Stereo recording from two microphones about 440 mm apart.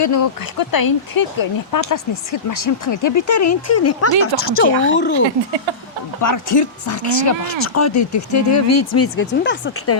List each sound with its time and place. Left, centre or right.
0.0 s speech: left
6.2 s speech: left